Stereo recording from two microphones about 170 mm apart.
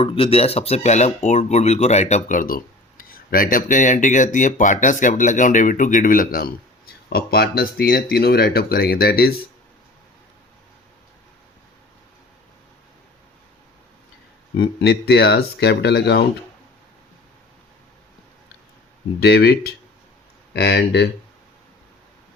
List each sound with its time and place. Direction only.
0.0 s speech: 35° left (ahead or behind); by 9.3 s 65° left (ahead or behind)
14.6 s speech: 85° left
19.2 s speech: 75° left (ahead or behind)